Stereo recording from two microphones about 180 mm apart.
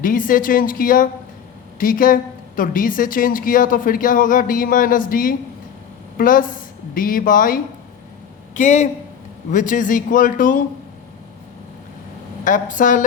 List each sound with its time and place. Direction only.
0.0 s speech: 50° left (ahead or behind)
12.5 s speech: 45° left (ahead or behind)